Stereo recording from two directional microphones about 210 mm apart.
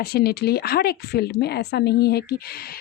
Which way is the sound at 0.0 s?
50° left (ahead or behind).